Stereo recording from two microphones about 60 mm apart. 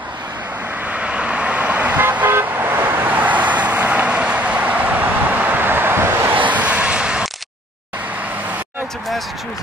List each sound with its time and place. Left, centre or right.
0.9 s vehicle: centre
2.0 s vehicle: right
6.4 s a sound: right